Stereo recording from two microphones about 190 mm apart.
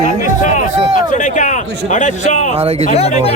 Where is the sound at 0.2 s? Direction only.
40° left (ahead or behind).